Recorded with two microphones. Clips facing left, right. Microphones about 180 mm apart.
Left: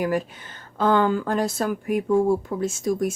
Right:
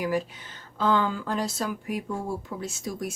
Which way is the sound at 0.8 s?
55° left (ahead or behind).